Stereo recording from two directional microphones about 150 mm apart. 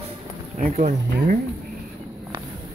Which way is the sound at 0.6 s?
60° right (ahead or behind).